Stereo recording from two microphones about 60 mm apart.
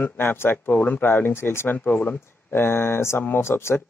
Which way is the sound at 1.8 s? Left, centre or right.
Left.